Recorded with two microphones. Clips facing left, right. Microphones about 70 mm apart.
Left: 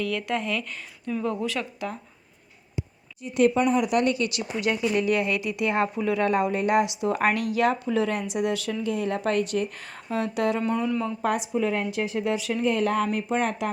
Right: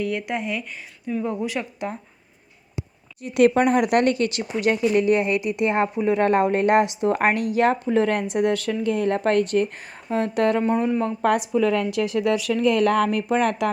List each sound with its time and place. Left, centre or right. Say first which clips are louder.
0.0 s speech: right 2 dB; right
3.2 s speech: right 4 dB; right
6.2 s speech: right 5 dB; right
9.7 s speech: right 4 dB; right
10.6 s speech: right 4 dB; right
11.0 s speech: right 5 dB; right
11.5 s speech: right 5 dB; right